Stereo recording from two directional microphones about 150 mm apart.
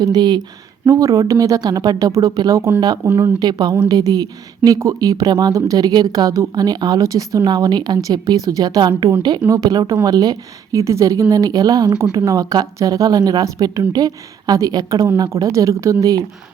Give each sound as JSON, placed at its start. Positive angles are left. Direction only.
{"t": 0.0, "sound": "speech", "side_deg": -30}